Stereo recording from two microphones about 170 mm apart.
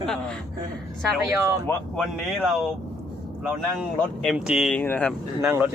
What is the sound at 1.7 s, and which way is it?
Speech, 5° left (ahead or behind).